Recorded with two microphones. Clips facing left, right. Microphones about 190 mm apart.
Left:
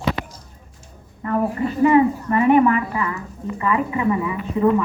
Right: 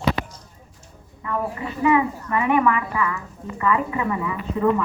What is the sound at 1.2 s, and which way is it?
A woman's voice, 45° left (ahead or behind).